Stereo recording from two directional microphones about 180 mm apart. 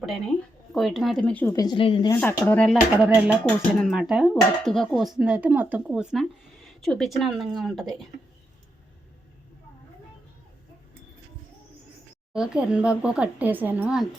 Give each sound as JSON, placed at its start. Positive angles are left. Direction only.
{"t": 0.7, "sound": "speech", "side_deg": 0}
{"t": 1.5, "sound": "speech", "side_deg": 25}
{"t": 2.2, "sound": "speech", "side_deg": 10}
{"t": 3.0, "sound": "speech", "side_deg": -5}
{"t": 12.3, "sound": "speech", "side_deg": -5}